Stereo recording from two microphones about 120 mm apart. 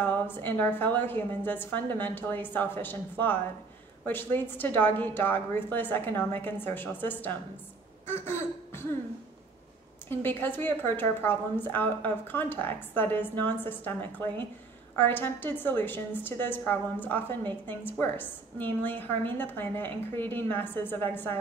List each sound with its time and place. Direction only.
0.0 s a woman's voice: 15° left (ahead or behind)
8.1 s throat clearing: 20° left (ahead or behind)
10.0 s a woman's voice: 15° left (ahead or behind)